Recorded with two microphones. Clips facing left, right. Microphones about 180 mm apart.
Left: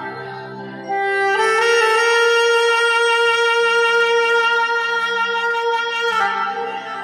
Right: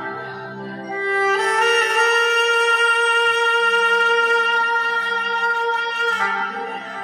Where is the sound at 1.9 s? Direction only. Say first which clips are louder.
Left 4 dB; 40° left (ahead or behind).